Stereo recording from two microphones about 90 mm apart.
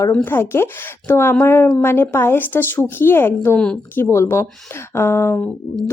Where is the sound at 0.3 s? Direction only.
25° left (ahead or behind).